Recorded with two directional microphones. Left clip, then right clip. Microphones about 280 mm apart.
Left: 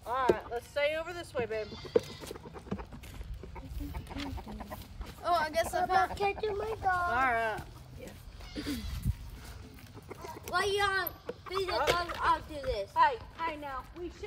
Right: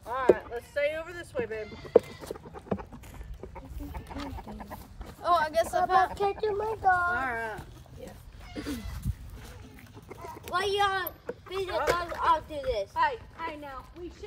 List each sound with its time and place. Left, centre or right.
0.1 s a sound: centre
1.9 s speech: centre
4.2 s chicken: centre
5.2 s speech: centre
7.2 s speech: centre
8.5 s speech: right
10.5 s speech: right
11.2 s speech: centre
12.2 s speech: right
12.9 s speech: centre